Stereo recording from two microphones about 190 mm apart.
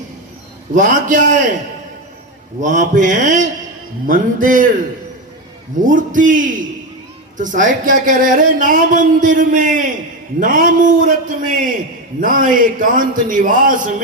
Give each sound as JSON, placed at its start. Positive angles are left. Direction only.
{"t": 0.8, "sound": "speech", "side_deg": -45}
{"t": 2.6, "sound": "speech", "side_deg": -40}
{"t": 5.8, "sound": "speech", "side_deg": -45}